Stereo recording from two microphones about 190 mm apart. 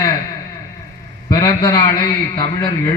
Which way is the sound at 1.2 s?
20° left (ahead or behind).